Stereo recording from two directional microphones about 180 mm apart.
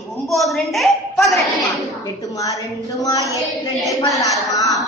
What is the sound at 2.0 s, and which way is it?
A woman's voice, 20° left (ahead or behind).